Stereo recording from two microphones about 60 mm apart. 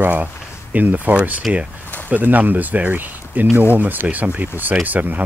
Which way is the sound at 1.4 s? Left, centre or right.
Centre.